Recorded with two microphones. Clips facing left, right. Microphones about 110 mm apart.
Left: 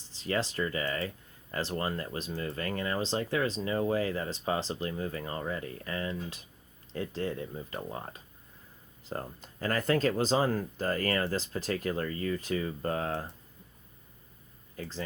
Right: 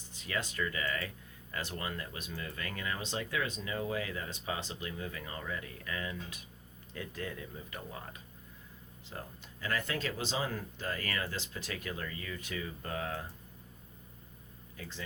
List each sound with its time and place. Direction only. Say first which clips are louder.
0.1 s speech: left 7 dB; 30° left (ahead or behind)
14.8 s speech: left 7 dB; 40° left (ahead or behind)